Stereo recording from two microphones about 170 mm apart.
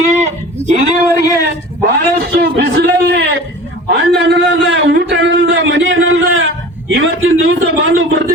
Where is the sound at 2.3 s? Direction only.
70° right (ahead or behind).